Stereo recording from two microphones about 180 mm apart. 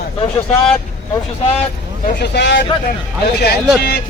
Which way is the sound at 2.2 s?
70° left (ahead or behind).